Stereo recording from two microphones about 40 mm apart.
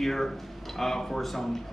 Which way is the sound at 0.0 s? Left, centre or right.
Centre.